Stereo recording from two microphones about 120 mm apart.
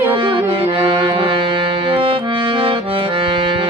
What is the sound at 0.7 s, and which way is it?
Accordion, 45° right (ahead or behind).